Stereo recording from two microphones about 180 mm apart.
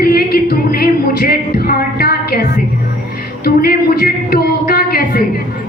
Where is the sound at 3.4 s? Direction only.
55° left (ahead or behind).